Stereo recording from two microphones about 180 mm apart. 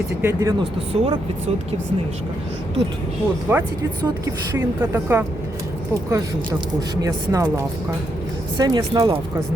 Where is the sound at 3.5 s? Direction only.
15° right (ahead or behind).